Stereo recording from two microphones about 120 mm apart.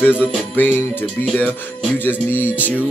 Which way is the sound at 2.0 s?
15° left (ahead or behind).